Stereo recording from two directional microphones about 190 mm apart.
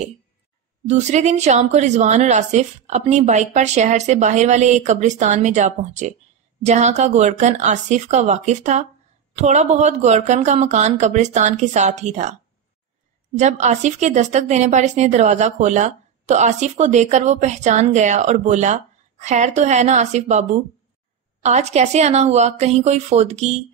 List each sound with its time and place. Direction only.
0.8 s a woman's voice: 35° right (ahead or behind)
13.4 s a woman's voice: 40° right (ahead or behind)